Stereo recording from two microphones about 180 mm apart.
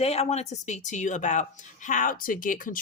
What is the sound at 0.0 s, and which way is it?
Speech, 35° left (ahead or behind).